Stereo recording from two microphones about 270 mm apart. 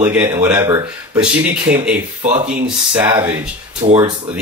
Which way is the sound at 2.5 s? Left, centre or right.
Centre.